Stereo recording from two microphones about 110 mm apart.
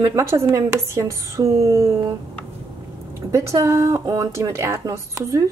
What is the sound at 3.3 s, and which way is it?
Speech, 25° right (ahead or behind).